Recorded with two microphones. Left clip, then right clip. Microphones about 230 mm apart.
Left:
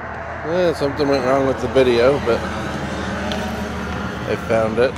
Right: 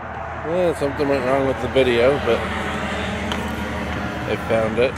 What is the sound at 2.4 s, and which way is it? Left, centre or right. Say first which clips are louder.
Vehicle: right 1 dB; left.